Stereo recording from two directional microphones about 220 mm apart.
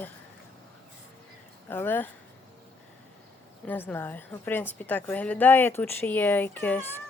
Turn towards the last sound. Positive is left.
turn(degrees=10)  # may be behind; listen again after turning